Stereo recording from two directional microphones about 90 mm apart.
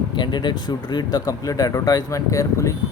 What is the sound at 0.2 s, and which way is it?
Speech, 55° left (ahead or behind).